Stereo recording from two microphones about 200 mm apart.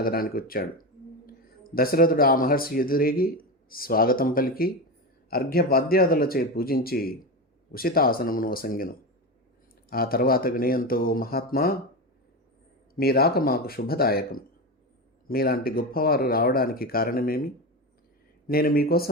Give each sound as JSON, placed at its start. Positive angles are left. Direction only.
{"t": 0.0, "sound": "speech", "side_deg": 45}
{"t": 13.0, "sound": "speech", "side_deg": 50}